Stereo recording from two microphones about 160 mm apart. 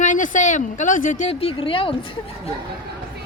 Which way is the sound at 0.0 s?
55° left (ahead or behind).